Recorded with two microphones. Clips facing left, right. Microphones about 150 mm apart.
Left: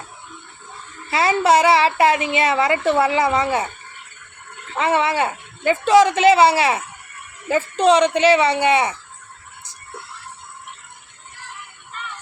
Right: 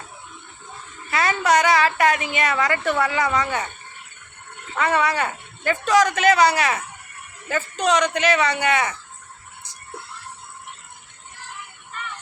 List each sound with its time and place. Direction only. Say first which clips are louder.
1.1 s a woman's voice: left 4 dB; 30° left (ahead or behind)
4.7 s a woman's voice: left 2 dB; 25° left (ahead or behind)